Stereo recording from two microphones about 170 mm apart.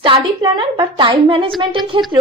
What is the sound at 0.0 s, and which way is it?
A woman's voice, 30° right (ahead or behind).